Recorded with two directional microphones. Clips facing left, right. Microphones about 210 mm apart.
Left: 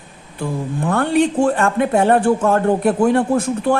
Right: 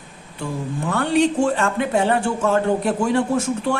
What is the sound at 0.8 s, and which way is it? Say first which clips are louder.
Speech: left 2 dB; 55° left (ahead or behind).